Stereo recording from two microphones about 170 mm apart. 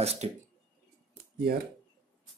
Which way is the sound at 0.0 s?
40° right (ahead or behind).